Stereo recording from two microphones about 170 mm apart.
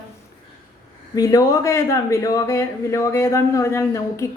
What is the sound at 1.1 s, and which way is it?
A woman's voice, 20° left (ahead or behind).